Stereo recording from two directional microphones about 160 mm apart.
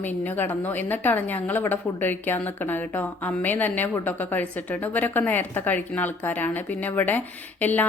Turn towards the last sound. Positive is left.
turn(degrees=10)  # may be behind; listen again after turning